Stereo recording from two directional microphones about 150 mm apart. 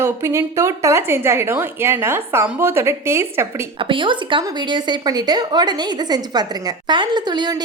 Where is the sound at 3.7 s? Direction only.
35° right (ahead or behind).